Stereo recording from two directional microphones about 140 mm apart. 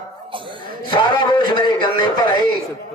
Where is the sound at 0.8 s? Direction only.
30° left (ahead or behind).